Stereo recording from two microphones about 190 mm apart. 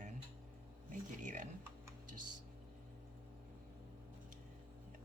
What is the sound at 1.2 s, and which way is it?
Speech, 40° right (ahead or behind).